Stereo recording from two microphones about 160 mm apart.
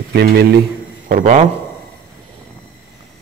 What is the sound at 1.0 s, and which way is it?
Speech, 55° right (ahead or behind).